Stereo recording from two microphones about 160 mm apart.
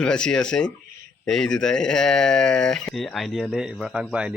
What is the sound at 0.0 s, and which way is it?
Speech, 5° left (ahead or behind).